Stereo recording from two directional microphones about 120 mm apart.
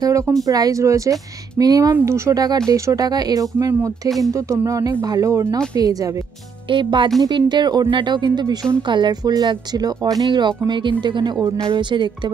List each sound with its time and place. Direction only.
0.0 s speech: 30° right (ahead or behind)
6.7 s speech: 40° right (ahead or behind)